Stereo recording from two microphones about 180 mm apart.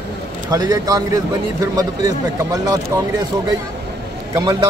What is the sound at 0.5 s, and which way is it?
Speech, 20° right (ahead or behind).